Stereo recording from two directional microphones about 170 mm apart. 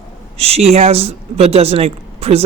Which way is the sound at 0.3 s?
35° right (ahead or behind).